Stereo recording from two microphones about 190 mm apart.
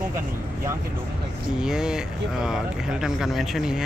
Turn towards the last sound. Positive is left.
turn(degrees=0)  # may be behind; listen again after turning